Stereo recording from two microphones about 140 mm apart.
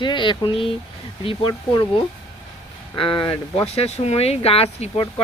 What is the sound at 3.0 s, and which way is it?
Speech, 35° left (ahead or behind).